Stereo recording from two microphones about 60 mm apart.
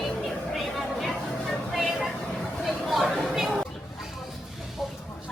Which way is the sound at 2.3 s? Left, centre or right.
Centre.